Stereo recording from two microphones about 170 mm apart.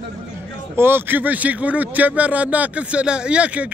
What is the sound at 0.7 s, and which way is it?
Speech, 15° right (ahead or behind).